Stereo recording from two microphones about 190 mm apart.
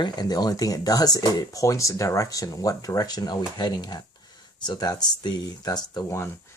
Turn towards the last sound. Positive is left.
turn(degrees=15)  # may be behind; listen again after turning